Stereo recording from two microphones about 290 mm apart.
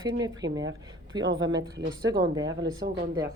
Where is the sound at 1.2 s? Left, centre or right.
Right.